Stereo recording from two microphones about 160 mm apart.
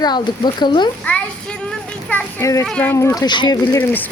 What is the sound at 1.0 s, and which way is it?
Speech, 10° left (ahead or behind).